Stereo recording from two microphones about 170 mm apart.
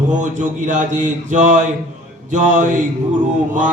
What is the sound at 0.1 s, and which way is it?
Mantra, 45° right (ahead or behind).